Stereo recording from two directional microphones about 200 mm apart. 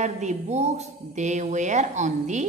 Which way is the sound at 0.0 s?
35° right (ahead or behind).